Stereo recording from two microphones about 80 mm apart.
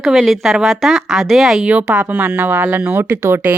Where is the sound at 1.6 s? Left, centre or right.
Centre; by 3.5 s right.